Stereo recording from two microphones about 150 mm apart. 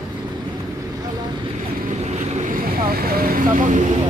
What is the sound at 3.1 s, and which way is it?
Speech, 75° right (ahead or behind).